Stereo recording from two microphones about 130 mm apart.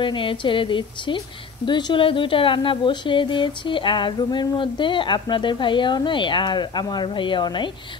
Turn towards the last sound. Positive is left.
turn(degrees=40)  # may be behind; listen again after turning